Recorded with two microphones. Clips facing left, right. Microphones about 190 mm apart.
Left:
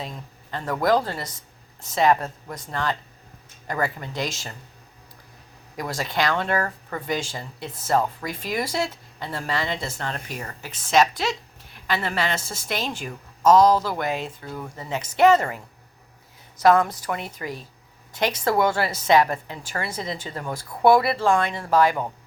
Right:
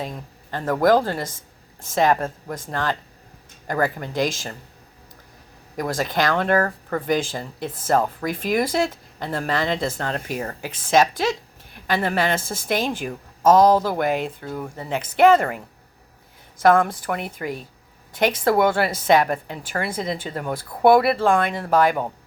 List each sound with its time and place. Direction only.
0.5 s speech: 45° right (ahead or behind)
5.7 s speech: 50° right (ahead or behind)